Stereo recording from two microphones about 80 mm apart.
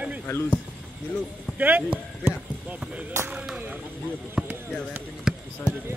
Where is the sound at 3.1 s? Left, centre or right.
Right.